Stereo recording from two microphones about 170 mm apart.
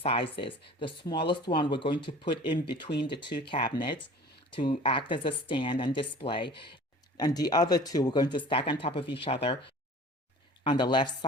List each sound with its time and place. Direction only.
0.0 s speech: 30° left (ahead or behind)